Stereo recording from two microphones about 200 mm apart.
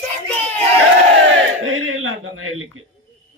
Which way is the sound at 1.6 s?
90° right.